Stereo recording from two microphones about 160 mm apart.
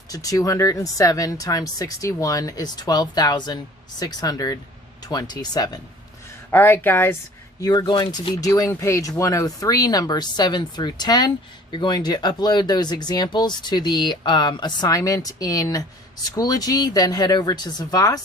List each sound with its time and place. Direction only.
0.1 s speech: 20° left (ahead or behind)
6.5 s speech: 15° left (ahead or behind)
7.6 s speech: 25° left (ahead or behind)